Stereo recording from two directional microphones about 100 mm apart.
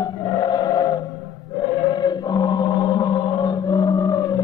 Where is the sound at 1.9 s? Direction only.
45° left (ahead or behind).